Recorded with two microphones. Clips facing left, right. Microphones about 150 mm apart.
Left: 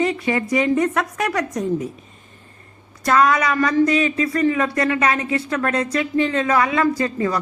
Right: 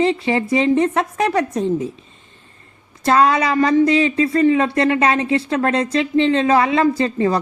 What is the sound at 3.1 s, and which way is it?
Speech, 25° right (ahead or behind).